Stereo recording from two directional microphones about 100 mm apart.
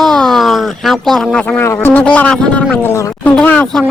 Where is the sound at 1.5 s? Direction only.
20° left (ahead or behind).